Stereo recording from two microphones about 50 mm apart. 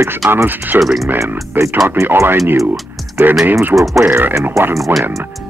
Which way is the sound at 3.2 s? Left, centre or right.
Right.